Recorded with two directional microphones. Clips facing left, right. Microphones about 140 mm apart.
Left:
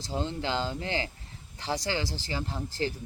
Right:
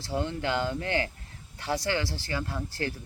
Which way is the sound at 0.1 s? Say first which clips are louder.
Right 2 dB; 25° left (ahead or behind).